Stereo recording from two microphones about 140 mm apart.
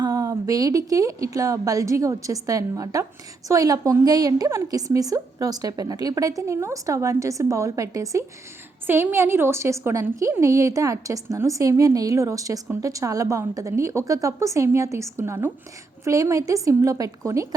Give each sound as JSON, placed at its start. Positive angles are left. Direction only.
{"t": 0.0, "sound": "a woman's voice", "side_deg": -25}